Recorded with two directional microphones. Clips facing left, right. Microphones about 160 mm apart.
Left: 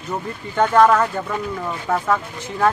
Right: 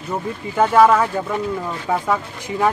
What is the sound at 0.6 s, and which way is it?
Speech, 5° right (ahead or behind).